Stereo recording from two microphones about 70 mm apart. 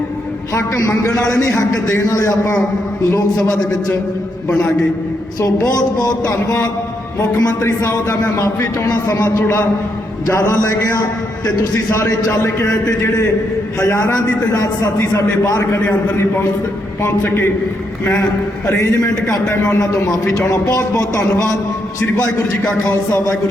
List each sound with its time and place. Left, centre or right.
0.5 s a man's voice: left
4.4 s a man's voice: centre
5.4 s a man's voice: left
7.6 s a man's voice: left
14.5 s speech: left
17.2 s a man's voice: left
18.7 s a man's voice: left
22.6 s speech: centre